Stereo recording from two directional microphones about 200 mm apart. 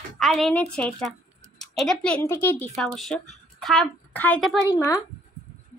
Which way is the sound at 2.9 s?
Centre (ahead or behind).